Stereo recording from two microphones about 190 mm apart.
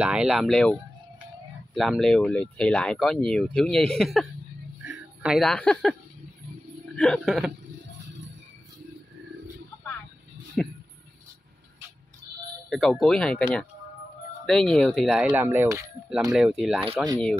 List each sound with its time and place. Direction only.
0.0 s speech: 5° right (ahead or behind)
7.0 s speech: centre (ahead or behind)
10.6 s speech: 5° left (ahead or behind)
12.6 s speech: centre (ahead or behind); by 15.9 s 15° right (ahead or behind)
16.1 s speech: centre (ahead or behind)
16.9 s speech: 20° right (ahead or behind)